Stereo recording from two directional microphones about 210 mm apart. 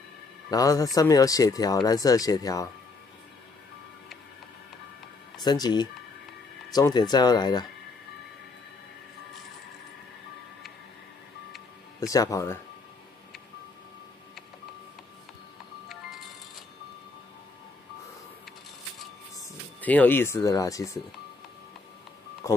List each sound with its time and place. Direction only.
0.5 s speech: 15° left (ahead or behind)
5.4 s speech: 20° left (ahead or behind)
12.1 s speech: 15° left (ahead or behind)
15.9 s music: centre (ahead or behind)
19.3 s speech: 5° left (ahead or behind)